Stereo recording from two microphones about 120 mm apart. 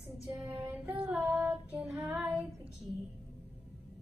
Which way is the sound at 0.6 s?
10° right (ahead or behind).